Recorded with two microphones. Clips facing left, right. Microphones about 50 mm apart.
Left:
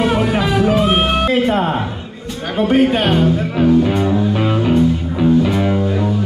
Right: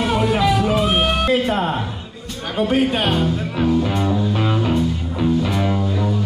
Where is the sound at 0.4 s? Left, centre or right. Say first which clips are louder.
Left 2 dB; centre.